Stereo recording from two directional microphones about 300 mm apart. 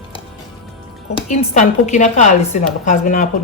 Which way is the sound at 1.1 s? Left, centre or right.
Left.